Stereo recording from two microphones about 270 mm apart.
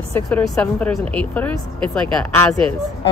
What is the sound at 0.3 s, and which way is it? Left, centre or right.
A woman's voice, centre.